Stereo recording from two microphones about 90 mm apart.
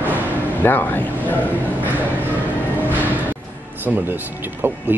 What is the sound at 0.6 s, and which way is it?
Speech, 20° left (ahead or behind).